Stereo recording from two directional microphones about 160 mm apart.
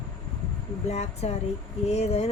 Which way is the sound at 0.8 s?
40° left (ahead or behind).